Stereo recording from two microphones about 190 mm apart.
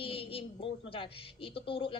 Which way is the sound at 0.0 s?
30° left (ahead or behind).